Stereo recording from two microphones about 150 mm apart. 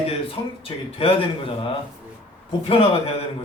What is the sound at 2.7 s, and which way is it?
Speech, 40° left (ahead or behind).